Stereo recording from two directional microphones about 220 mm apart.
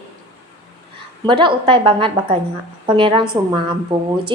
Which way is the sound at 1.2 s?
20° right (ahead or behind).